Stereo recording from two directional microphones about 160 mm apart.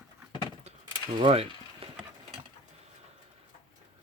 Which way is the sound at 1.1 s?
35° right (ahead or behind).